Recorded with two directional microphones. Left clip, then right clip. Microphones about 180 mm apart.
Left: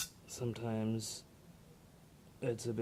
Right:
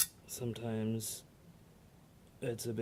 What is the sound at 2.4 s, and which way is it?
Speech, 15° left (ahead or behind).